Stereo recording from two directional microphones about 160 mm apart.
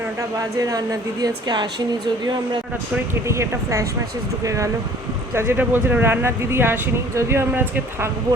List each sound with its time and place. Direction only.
0.2 s speech: 20° right (ahead or behind)